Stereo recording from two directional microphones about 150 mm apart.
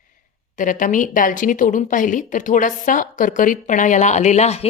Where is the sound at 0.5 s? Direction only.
60° left (ahead or behind).